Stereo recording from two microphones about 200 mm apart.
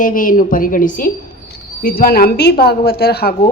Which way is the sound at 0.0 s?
45° left (ahead or behind).